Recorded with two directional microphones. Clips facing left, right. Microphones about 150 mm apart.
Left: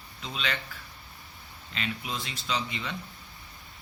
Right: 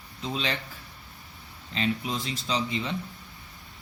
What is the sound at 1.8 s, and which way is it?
Speech, 30° right (ahead or behind).